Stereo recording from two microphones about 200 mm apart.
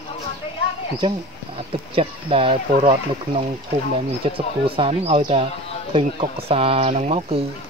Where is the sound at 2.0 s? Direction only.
25° right (ahead or behind).